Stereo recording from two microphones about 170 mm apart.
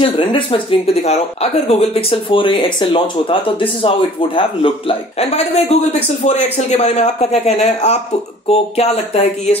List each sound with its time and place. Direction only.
0.0 s speech: 30° left (ahead or behind)